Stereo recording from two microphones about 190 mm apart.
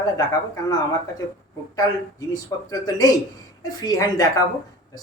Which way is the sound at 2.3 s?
20° left (ahead or behind).